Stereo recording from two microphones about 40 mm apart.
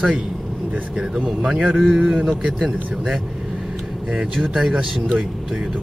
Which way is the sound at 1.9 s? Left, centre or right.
Centre.